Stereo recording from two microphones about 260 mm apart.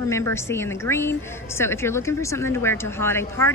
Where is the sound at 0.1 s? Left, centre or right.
Centre.